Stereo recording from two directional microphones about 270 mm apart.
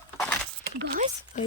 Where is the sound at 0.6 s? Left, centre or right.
Right.